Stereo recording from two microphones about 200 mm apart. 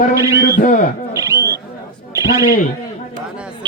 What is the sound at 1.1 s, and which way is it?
Owl, 15° right (ahead or behind).